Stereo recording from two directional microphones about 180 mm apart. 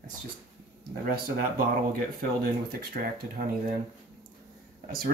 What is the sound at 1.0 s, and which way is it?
Speech, 50° right (ahead or behind).